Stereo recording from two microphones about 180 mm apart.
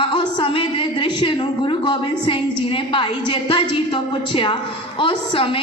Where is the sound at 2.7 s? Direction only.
25° left (ahead or behind).